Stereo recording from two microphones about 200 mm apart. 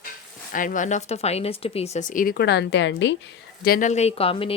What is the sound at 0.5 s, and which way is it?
Speech, 40° left (ahead or behind).